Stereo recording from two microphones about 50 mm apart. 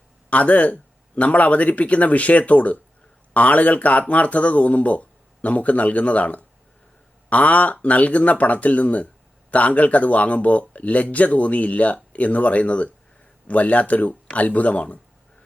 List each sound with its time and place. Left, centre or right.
0.3 s speech: left